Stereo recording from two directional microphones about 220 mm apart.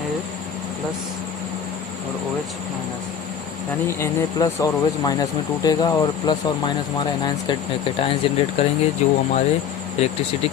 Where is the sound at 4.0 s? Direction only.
15° left (ahead or behind).